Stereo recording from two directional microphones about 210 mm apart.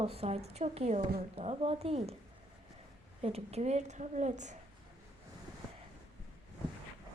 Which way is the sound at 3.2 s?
30° right (ahead or behind).